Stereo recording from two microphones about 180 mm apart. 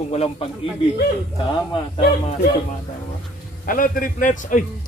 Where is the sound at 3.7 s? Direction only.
50° left (ahead or behind).